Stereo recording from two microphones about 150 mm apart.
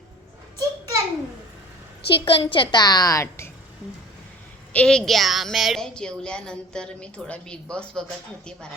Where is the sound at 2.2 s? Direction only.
35° left (ahead or behind); by 3.5 s 20° left (ahead or behind).